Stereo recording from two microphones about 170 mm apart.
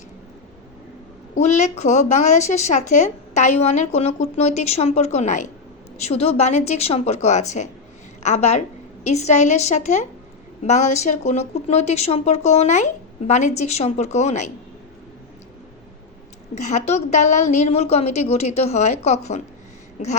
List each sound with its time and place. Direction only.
1.4 s a woman's voice: 40° left (ahead or behind)
16.6 s a woman's voice: 45° left (ahead or behind)